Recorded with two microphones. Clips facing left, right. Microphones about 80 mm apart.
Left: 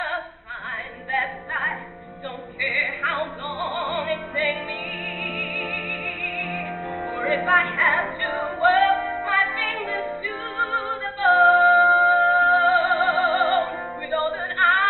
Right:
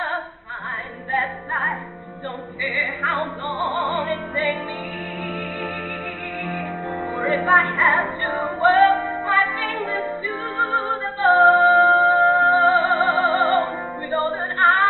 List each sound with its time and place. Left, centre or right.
1.1 s music: right
7.2 s music: right
7.5 s music: right
8.5 s music: right
9.8 s music: right
10.0 s music: right
11.4 s music: centre
12.7 s music: right